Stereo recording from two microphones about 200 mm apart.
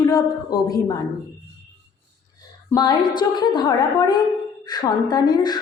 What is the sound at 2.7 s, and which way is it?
A woman's voice, 20° left (ahead or behind).